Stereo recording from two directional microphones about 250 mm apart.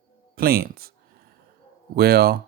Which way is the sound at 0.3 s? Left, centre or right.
Right.